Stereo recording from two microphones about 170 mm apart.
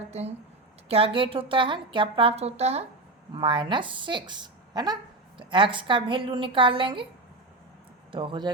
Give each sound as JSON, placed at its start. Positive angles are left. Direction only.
{"t": 0.1, "sound": "a woman's voice", "side_deg": -40}
{"t": 3.3, "sound": "a woman's voice", "side_deg": -30}
{"t": 8.1, "sound": "a woman's voice", "side_deg": -30}